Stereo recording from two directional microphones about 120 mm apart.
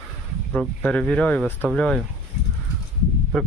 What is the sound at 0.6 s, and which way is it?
Speech, 5° left (ahead or behind).